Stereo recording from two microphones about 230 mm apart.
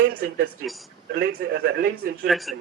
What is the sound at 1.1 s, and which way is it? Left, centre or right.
Speech, right.